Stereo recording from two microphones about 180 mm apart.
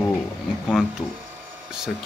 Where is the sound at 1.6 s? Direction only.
5° right (ahead or behind).